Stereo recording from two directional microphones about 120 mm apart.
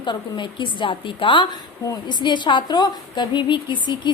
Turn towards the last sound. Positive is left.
turn(degrees=40)  # may be behind; listen again after turning